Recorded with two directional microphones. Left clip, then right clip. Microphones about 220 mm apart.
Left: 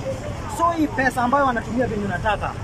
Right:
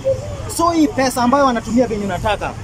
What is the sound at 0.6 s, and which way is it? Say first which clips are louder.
Speech: right 5 dB; 15° right (ahead or behind).